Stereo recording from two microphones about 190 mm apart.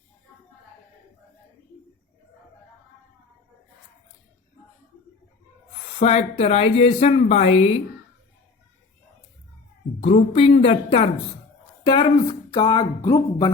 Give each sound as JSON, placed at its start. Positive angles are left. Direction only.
{"t": 6.0, "sound": "a woman's voice", "side_deg": 35}
{"t": 10.0, "sound": "a woman's voice", "side_deg": 30}